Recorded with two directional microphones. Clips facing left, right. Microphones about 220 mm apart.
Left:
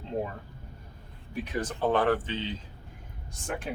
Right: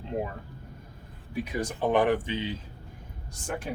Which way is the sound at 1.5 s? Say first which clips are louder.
Right 1 dB; 15° right (ahead or behind).